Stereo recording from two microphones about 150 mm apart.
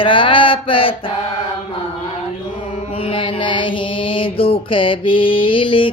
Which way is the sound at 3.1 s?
35° left (ahead or behind).